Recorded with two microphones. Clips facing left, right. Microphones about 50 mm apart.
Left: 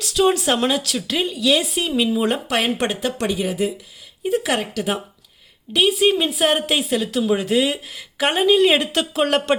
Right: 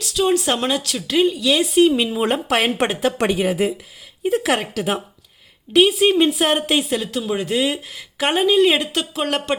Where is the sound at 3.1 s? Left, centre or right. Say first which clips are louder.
Right 3 dB; right.